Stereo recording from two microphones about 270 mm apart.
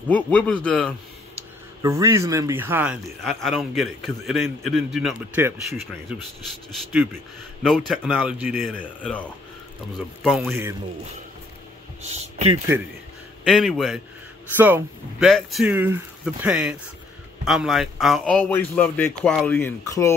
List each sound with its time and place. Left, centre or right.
0.1 s a man's voice: centre
1.8 s a man's voice: centre
12.1 s speech: right
13.4 s a man's voice: centre